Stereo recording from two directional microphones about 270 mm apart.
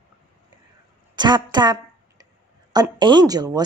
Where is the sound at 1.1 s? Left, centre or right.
Centre.